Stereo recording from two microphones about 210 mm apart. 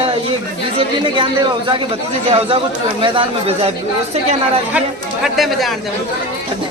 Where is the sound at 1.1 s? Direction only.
25° right (ahead or behind).